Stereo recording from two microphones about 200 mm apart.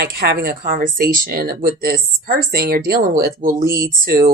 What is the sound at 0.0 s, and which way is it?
Speech, 50° right (ahead or behind).